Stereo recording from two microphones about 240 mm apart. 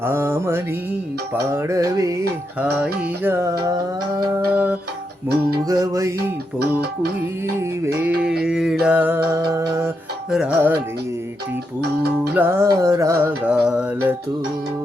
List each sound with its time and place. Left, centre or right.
0.0 s music: centre
8.0 s music: centre
11.8 s music: right
12.3 s music: centre